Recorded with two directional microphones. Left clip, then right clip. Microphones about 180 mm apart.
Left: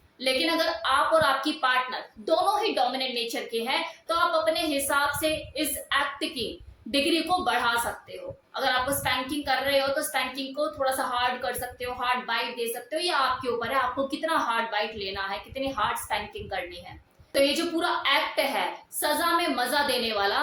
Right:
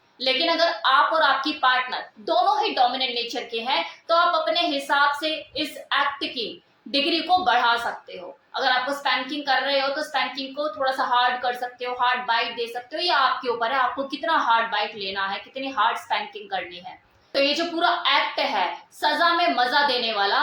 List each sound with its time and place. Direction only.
0.2 s a woman's voice: 20° left (ahead or behind)